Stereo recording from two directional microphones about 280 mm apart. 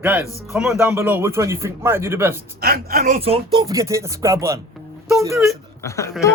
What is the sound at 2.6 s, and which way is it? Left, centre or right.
Speech, right.